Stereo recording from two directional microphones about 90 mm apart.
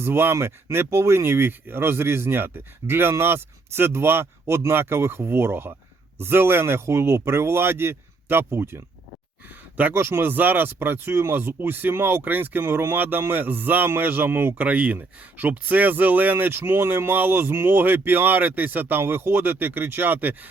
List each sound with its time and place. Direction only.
0.0 s speech: 25° right (ahead or behind)